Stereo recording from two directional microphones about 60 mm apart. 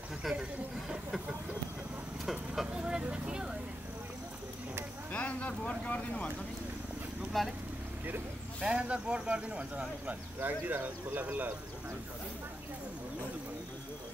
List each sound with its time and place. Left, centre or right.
2.2 s vehicle: centre
5.1 s speech: left
7.3 s speech: centre
8.5 s speech: centre
10.4 s speech: right